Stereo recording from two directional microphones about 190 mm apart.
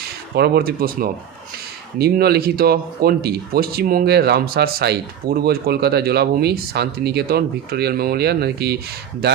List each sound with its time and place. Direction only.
0.3 s speech: 55° right (ahead or behind)